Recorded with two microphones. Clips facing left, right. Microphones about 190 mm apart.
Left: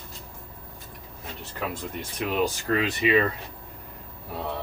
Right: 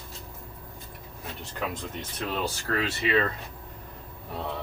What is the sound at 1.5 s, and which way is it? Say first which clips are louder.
Speech: left 1 dB; 10° left (ahead or behind).